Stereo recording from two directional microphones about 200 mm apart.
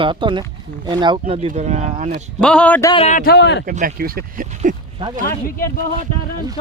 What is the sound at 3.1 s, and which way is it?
Speech, 50° left (ahead or behind).